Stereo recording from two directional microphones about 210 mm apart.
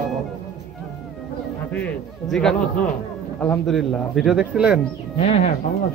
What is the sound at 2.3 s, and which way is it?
Speech, centre (ahead or behind).